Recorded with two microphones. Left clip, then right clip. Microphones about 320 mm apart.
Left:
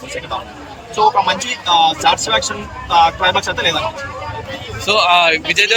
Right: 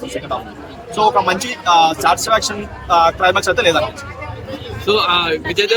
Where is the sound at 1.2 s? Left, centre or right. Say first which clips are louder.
Right 1 dB; centre.